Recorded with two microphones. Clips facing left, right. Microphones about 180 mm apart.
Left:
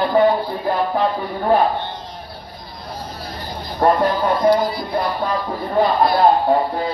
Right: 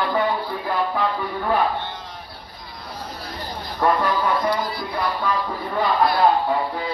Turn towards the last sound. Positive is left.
turn(degrees=40)  # may be behind; listen again after turning